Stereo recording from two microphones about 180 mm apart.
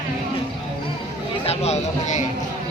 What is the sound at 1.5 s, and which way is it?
Speech, 35° left (ahead or behind).